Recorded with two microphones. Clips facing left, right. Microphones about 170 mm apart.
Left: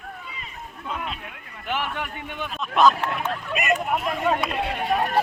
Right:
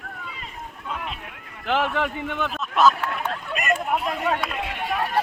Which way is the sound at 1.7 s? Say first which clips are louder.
Right 6 dB; 90° right.